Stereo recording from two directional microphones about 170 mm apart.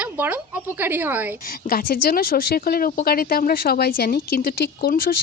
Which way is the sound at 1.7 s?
60° left (ahead or behind).